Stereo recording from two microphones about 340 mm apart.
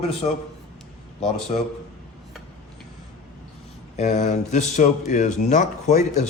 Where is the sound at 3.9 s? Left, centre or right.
Left.